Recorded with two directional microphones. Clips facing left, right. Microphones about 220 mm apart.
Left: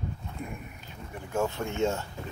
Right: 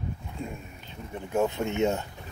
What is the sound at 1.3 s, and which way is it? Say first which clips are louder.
Speech: right 3 dB; 20° right (ahead or behind).